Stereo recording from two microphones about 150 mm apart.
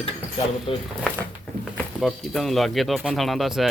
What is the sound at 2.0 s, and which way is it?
Speech, centre (ahead or behind).